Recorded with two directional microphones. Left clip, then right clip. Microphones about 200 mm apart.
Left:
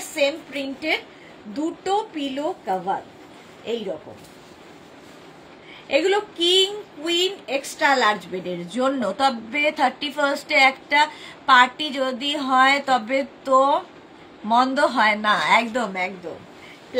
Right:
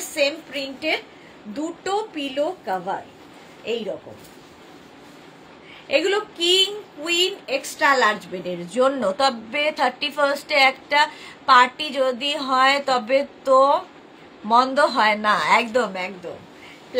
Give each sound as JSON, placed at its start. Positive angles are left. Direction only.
{"t": 0.1, "sound": "a woman's voice", "side_deg": -20}
{"t": 5.9, "sound": "a woman's voice", "side_deg": -20}